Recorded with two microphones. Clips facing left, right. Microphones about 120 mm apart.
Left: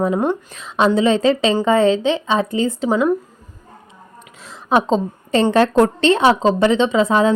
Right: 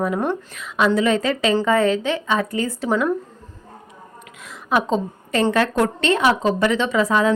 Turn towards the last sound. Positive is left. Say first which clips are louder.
# left 3 dB
turn(degrees=25)  # may be behind; listen again after turning